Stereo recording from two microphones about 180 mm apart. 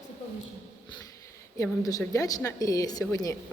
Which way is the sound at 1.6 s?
20° left (ahead or behind).